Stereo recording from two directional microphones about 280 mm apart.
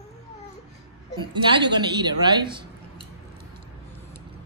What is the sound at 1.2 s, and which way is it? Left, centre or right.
Speech, centre.